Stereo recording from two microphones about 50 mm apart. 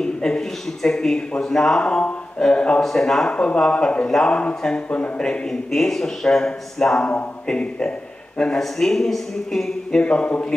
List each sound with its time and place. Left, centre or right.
0.0 s speech: centre
2.8 s speech: centre
8.5 s speech: centre
10.0 s speech: left